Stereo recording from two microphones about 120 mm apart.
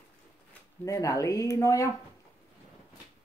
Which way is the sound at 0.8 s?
25° left (ahead or behind).